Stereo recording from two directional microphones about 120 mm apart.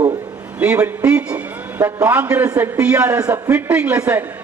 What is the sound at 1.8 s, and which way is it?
A man's voice, 15° right (ahead or behind).